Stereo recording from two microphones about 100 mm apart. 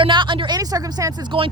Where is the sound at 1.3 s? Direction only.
55° right (ahead or behind).